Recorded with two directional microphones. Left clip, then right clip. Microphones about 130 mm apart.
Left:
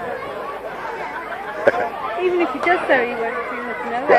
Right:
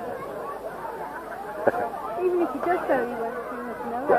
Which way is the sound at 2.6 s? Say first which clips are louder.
Left 10 dB; 35° left (ahead or behind).